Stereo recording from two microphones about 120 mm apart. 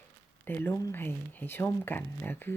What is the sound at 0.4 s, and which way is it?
Speech, 20° left (ahead or behind).